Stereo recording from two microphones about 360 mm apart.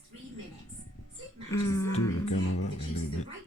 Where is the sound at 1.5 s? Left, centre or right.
Centre.